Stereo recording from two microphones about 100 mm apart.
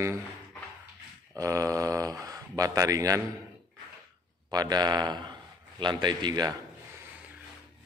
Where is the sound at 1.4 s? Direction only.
35° right (ahead or behind).